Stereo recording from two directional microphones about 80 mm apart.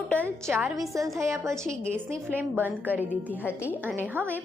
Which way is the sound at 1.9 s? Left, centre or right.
Right.